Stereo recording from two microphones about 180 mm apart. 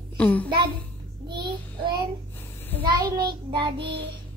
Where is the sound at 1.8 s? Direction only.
25° right (ahead or behind).